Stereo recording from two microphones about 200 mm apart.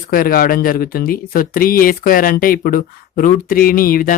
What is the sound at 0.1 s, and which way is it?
Speech, 45° left (ahead or behind).